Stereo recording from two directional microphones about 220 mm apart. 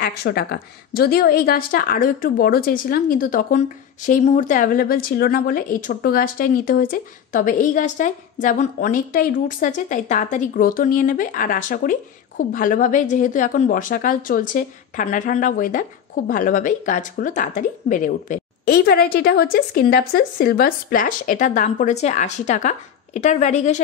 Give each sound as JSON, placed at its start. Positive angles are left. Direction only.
{"t": 0.0, "sound": "a woman's voice", "side_deg": 45}